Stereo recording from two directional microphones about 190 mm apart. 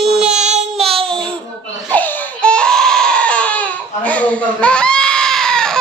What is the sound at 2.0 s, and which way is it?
Baby cry, 10° left (ahead or behind).